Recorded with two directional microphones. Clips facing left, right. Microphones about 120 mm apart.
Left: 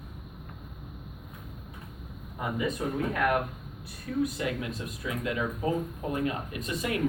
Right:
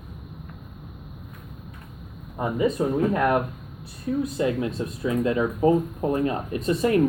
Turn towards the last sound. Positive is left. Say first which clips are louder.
# right 10 dB
turn(degrees=-35)  # may be behind; listen again after turning